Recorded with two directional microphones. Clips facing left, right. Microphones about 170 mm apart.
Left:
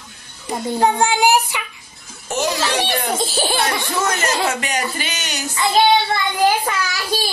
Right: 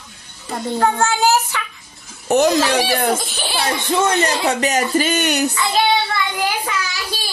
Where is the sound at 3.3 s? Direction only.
40° left (ahead or behind).